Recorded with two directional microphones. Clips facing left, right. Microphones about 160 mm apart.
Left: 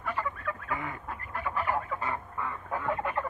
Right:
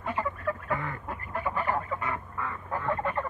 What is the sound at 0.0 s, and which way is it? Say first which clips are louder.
Fowl: right 2 dB; 20° right (ahead or behind).